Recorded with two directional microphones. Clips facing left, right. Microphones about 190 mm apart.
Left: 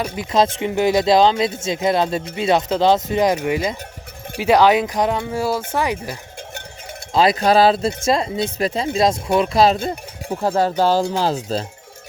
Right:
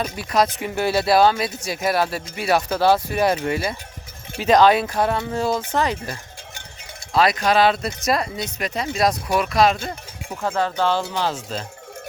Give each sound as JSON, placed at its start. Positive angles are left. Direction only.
{"t": 0.2, "sound": "speech", "side_deg": 25}
{"t": 7.1, "sound": "speech", "side_deg": 25}